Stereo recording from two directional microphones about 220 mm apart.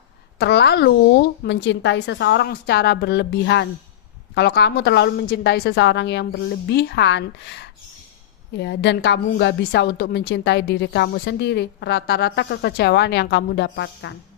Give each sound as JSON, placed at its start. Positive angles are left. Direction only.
{"t": 0.3, "sound": "a woman's voice", "side_deg": 50}